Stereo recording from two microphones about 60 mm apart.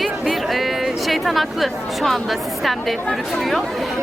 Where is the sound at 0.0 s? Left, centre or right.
Centre.